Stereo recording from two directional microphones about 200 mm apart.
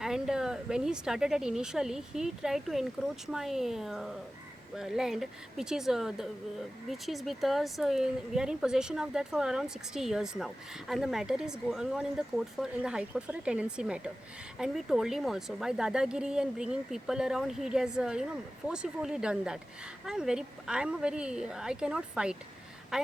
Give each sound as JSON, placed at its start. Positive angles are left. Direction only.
{"t": 0.0, "sound": "speech", "side_deg": -5}